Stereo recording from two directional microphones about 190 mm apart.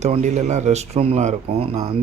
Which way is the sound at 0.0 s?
40° right (ahead or behind).